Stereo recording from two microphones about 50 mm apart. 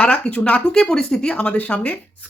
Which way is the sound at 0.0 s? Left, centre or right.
Left.